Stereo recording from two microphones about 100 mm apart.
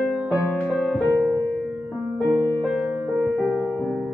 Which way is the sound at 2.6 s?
10° right (ahead or behind).